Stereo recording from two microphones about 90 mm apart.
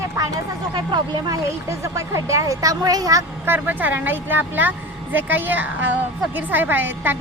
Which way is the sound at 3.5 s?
20° right (ahead or behind).